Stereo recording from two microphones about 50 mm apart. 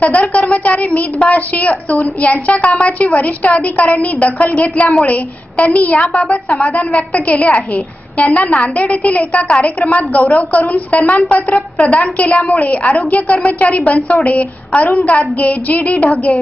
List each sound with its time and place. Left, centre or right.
0.0 s a woman's voice: left
6.1 s a woman's voice: centre
6.7 s a woman's voice: left